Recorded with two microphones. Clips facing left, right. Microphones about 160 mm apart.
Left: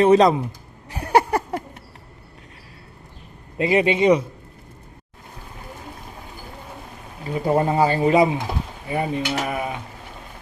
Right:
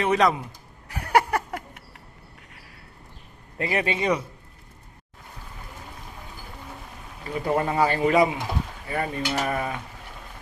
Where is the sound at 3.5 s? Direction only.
20° left (ahead or behind).